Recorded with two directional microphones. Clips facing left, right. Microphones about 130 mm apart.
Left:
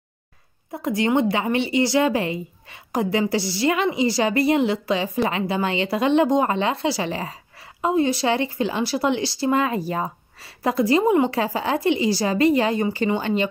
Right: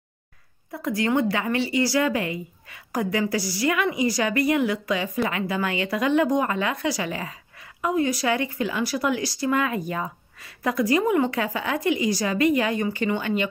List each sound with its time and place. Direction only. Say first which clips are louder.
0.7 s a woman's voice: left 3 dB; 20° left (ahead or behind)